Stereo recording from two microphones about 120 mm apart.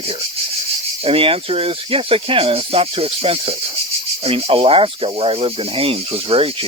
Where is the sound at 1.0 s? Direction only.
50° right (ahead or behind).